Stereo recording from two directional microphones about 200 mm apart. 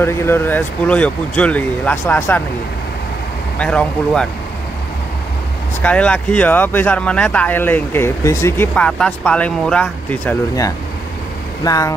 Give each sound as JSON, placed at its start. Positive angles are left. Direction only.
{"t": 0.0, "sound": "speech", "side_deg": 10}
{"t": 3.5, "sound": "speech", "side_deg": 5}
{"t": 5.8, "sound": "speech", "side_deg": 5}
{"t": 11.6, "sound": "speech", "side_deg": 15}